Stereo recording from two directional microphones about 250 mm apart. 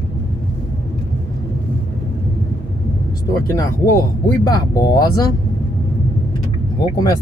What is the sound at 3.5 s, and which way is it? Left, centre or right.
Speech, centre.